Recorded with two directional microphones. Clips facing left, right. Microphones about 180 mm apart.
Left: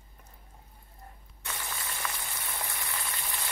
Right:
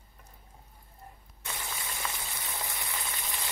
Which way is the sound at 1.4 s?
20° right (ahead or behind).